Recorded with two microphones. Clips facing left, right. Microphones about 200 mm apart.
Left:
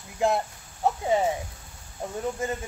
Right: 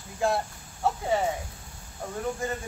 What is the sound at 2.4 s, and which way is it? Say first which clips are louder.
Speech: left 3 dB; 20° left (ahead or behind).